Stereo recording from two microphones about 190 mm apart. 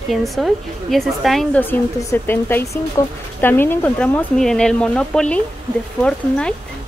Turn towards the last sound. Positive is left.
turn(degrees=5)  # may be behind; listen again after turning